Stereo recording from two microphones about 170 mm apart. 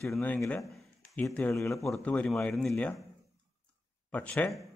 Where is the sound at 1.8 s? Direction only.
5° left (ahead or behind).